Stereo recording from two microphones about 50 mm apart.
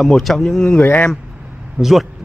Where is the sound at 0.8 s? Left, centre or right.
Left.